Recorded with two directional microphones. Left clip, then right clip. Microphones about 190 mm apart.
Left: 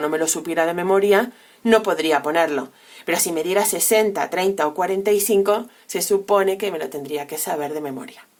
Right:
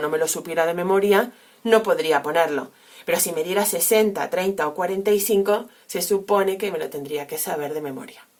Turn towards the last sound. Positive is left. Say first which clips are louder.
# left 2 dB
turn(degrees=25)  # may be behind; listen again after turning